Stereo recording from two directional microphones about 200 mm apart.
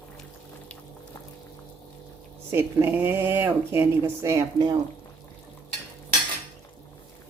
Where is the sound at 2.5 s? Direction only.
10° right (ahead or behind).